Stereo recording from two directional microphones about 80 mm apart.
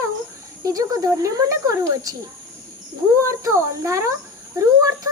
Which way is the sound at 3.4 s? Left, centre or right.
Right.